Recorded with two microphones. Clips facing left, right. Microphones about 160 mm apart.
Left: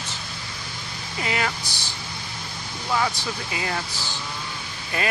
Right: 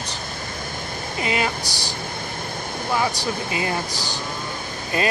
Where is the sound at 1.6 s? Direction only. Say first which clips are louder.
Right 6 dB; 40° right (ahead or behind).